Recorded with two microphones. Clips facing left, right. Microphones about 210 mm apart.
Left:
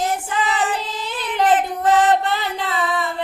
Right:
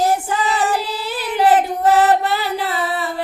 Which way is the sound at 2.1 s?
10° right (ahead or behind).